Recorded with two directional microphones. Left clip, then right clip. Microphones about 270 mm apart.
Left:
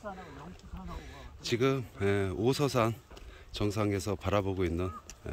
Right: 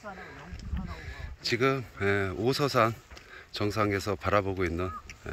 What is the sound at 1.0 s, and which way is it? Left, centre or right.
Speech, centre.